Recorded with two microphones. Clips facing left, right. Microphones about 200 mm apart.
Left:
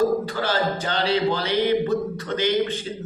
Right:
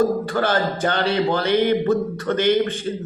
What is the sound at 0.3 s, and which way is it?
A man's voice, 50° right (ahead or behind).